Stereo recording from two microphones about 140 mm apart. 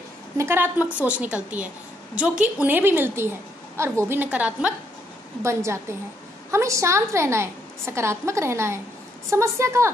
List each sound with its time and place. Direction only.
0.4 s a woman's voice: 15° right (ahead or behind)
5.4 s a woman's voice: 20° right (ahead or behind)